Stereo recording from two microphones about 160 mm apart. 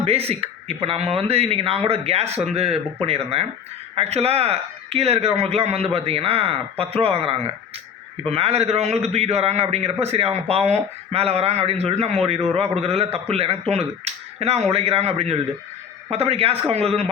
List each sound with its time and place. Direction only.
0.0 s a man's voice: 40° right (ahead or behind)